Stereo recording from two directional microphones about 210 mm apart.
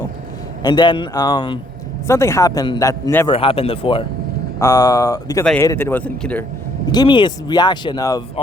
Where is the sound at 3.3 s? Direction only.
25° left (ahead or behind); by 6.4 s 5° left (ahead or behind).